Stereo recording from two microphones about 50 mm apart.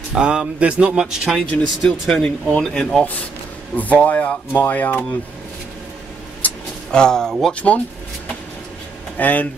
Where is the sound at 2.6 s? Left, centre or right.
Centre.